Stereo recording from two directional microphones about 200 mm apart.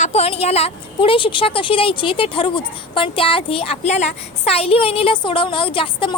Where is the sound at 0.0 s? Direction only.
30° left (ahead or behind).